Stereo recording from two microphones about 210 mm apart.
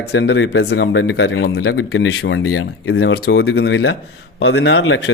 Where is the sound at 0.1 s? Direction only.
60° left (ahead or behind).